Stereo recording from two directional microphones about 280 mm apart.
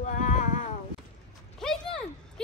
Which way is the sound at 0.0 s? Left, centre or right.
Left.